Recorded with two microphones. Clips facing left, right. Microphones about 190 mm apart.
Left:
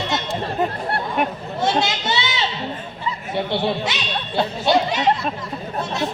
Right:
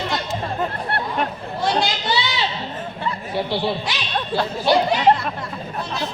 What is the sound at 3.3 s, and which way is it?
Speech, 20° left (ahead or behind).